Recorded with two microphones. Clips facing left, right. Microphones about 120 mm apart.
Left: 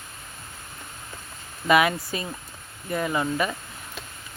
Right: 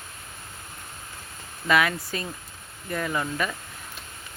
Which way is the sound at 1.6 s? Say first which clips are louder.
Left 3 dB; 15° left (ahead or behind).